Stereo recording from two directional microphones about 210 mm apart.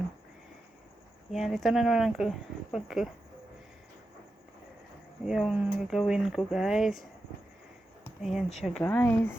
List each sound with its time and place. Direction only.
1.3 s speech: centre (ahead or behind)
5.2 s speech: 5° right (ahead or behind)
8.2 s speech: centre (ahead or behind)